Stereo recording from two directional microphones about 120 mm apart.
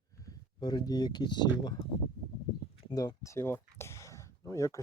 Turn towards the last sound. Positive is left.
turn(degrees=25)  # may be behind; listen again after turning